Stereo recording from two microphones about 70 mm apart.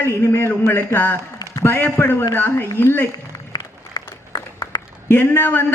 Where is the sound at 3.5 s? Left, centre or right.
Left.